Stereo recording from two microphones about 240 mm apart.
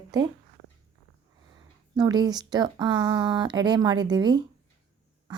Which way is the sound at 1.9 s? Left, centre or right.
Centre.